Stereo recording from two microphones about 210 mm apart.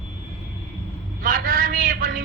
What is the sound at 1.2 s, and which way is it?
A man's voice, 40° right (ahead or behind).